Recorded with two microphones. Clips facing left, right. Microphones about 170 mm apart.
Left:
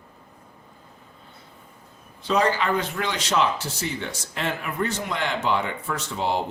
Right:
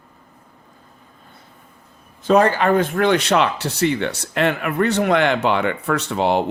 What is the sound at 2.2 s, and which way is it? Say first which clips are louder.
Speech: right 7 dB; 50° right (ahead or behind).